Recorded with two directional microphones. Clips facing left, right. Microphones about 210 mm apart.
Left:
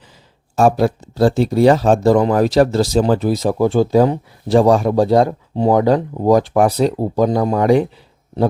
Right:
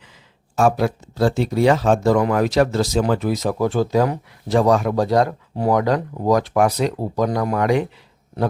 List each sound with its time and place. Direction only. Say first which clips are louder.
0.5 s speech: left 4 dB; 35° left (ahead or behind)